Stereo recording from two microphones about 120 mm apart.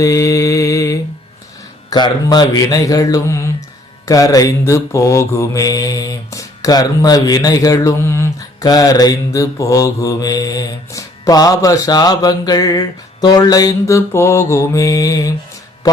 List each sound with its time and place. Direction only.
0.0 s mantra: 25° left (ahead or behind)
1.9 s speech: 35° left (ahead or behind)
4.0 s mantra: 30° left (ahead or behind)